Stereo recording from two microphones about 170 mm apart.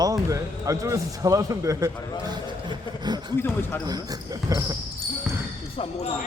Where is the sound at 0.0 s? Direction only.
20° right (ahead or behind).